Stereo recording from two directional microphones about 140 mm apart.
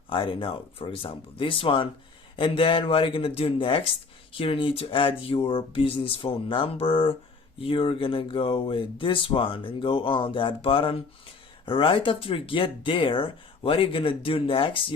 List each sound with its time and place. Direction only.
0.1 s speech: 40° left (ahead or behind)